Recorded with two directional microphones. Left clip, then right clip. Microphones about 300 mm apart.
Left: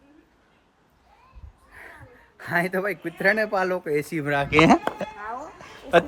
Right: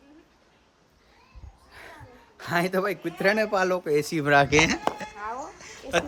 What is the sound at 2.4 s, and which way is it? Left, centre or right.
Speech, centre.